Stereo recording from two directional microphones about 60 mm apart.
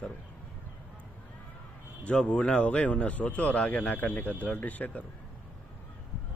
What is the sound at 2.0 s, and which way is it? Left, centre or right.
Speech, centre.